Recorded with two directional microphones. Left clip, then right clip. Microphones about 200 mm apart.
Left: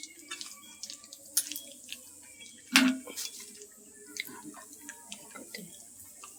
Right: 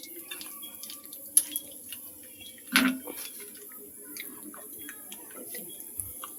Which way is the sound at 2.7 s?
Centre (ahead or behind).